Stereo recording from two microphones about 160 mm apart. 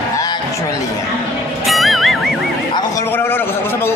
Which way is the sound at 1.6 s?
Centre (ahead or behind).